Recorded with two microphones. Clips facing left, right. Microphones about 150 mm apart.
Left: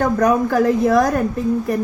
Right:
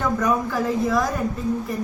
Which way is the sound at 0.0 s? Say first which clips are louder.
Left 6 dB; 65° left (ahead or behind).